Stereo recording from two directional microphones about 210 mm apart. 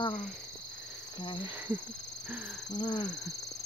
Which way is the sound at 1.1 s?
20° left (ahead or behind).